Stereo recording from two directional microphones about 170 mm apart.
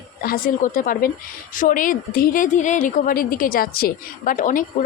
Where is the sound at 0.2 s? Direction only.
55° left (ahead or behind).